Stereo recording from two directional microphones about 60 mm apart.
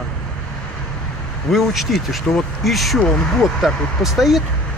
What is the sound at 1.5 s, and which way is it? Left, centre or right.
Speech, centre.